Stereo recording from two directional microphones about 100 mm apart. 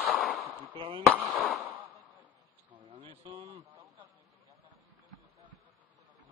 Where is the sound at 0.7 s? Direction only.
55° right (ahead or behind).